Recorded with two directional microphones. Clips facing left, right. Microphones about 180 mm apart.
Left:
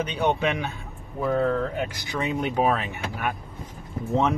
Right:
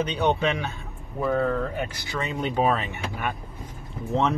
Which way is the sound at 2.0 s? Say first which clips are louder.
Left 2 dB; 15° left (ahead or behind).